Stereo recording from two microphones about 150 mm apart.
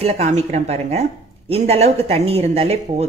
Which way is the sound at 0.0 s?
45° right (ahead or behind).